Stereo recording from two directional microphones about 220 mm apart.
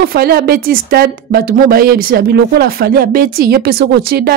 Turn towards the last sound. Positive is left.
turn(degrees=-45)  # may be behind; listen again after turning